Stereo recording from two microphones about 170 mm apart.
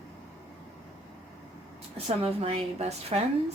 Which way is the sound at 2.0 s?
35° right (ahead or behind).